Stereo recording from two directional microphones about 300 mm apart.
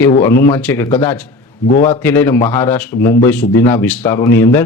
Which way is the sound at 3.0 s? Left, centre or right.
Left.